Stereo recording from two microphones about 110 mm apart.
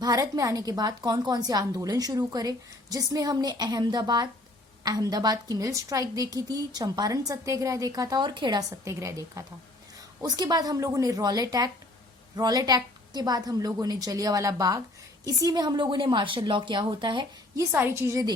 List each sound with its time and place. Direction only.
0.0 s a woman's voice: 35° right (ahead or behind)
8.8 s a woman's voice: 25° right (ahead or behind)
10.2 s a woman's voice: 40° right (ahead or behind)
17.6 s a woman's voice: 20° right (ahead or behind)